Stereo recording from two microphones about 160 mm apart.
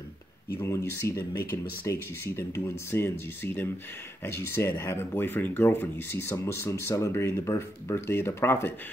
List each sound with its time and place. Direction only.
0.6 s speech: 15° left (ahead or behind)